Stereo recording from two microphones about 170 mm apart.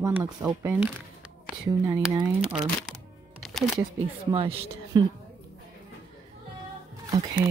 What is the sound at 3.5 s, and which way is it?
Speech, centre (ahead or behind).